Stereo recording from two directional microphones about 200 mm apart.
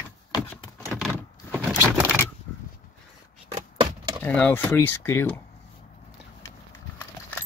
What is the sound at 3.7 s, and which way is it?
Typewriter, 25° right (ahead or behind).